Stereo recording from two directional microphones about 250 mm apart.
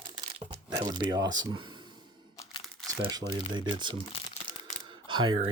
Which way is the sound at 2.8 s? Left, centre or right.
Centre.